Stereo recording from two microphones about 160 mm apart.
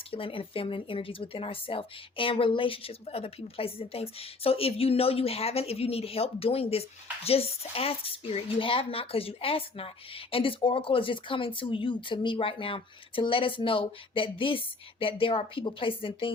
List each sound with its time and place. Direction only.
0.1 s speech: 35° left (ahead or behind)